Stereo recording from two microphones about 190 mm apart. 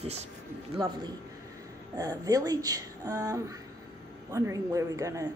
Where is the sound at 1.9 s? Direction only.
20° right (ahead or behind).